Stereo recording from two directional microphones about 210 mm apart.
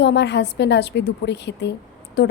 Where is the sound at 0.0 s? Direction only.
55° left (ahead or behind).